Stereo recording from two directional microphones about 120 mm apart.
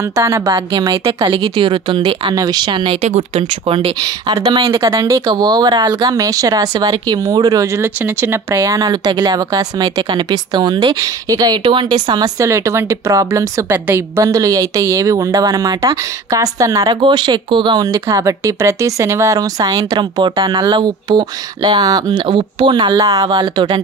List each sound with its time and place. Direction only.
0.1 s a woman's voice: 25° right (ahead or behind)
0.7 s speech: 40° right (ahead or behind)
3.0 s speech: 65° right (ahead or behind); by 4.8 s 45° right (ahead or behind)
5.0 s speech: 25° right (ahead or behind)
12.4 s a woman's voice: 25° right (ahead or behind)